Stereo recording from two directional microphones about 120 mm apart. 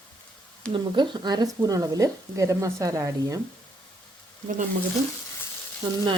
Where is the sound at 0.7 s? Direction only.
40° right (ahead or behind).